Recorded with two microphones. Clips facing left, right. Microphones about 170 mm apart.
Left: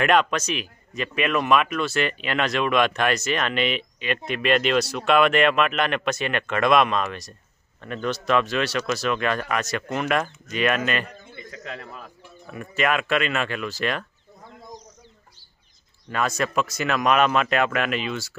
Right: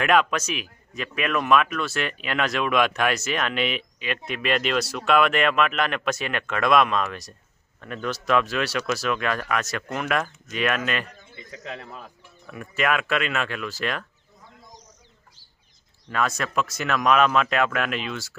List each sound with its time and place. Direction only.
0.0 s speech: 5° right (ahead or behind)
11.6 s a man's voice: 20° right (ahead or behind)
12.4 s speech: centre (ahead or behind)
16.1 s speech: centre (ahead or behind)